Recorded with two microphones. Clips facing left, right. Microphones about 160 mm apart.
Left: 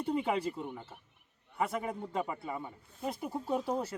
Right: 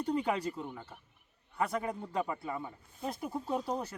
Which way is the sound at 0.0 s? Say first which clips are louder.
Even; 5° left (ahead or behind).